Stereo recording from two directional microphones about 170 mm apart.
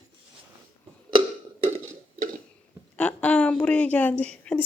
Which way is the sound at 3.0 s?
5° left (ahead or behind).